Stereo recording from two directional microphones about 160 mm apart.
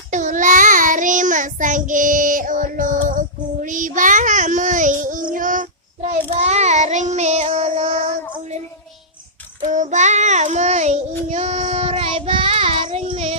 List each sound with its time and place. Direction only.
0.1 s child singing: 50° right (ahead or behind)
9.6 s child singing: 50° right (ahead or behind)